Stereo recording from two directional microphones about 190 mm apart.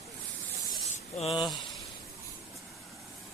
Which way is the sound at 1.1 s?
30° left (ahead or behind).